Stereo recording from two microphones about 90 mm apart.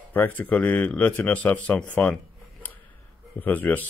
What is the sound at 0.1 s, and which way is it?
A man's voice, 20° left (ahead or behind).